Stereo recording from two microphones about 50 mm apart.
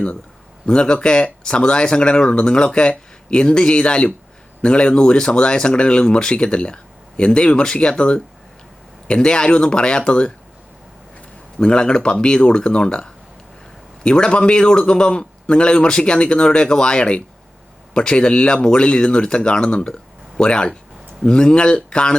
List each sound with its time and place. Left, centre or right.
0.7 s a man's voice: centre
11.6 s a man's voice: centre